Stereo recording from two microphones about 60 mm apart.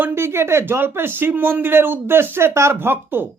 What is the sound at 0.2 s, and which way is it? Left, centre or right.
Speech, right.